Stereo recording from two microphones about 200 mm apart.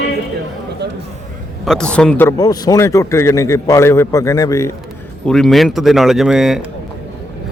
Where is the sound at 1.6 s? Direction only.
5° left (ahead or behind).